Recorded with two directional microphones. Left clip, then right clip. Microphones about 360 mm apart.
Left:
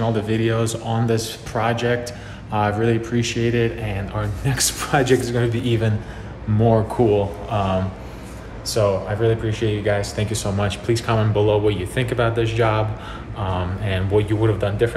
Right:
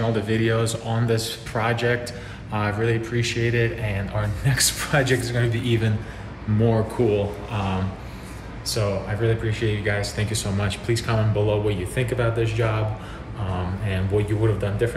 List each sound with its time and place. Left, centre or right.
0.0 s speech: centre
8.7 s speech: centre